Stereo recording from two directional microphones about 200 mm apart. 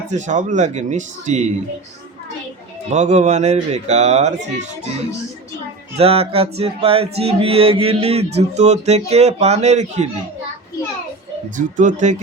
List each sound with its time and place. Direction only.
0.1 s speech: 35° right (ahead or behind)
2.9 s speech: 35° right (ahead or behind)
6.0 s music: 30° right (ahead or behind)
11.5 s speech: 40° right (ahead or behind)